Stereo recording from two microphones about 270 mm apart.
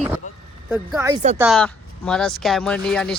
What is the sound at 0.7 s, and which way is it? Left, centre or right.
Speech, centre.